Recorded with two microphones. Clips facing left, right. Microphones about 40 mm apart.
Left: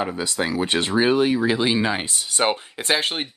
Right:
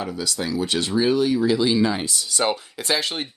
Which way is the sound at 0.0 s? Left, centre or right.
Left.